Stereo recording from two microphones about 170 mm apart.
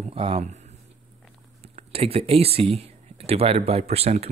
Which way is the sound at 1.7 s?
35° right (ahead or behind).